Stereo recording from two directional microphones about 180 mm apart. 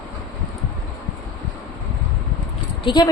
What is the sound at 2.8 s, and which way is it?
Speech, 25° left (ahead or behind).